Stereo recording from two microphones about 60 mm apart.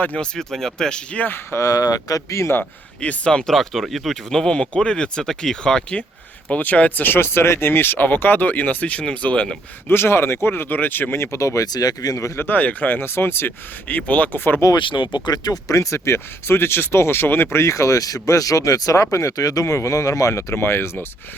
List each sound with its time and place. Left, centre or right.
0.2 s speech: centre
1.2 s speech: left
1.6 s speech: left
3.0 s speech: centre
3.5 s speech: centre
9.9 s speech: left
11.2 s speech: left
12.4 s speech: left
15.3 s speech: left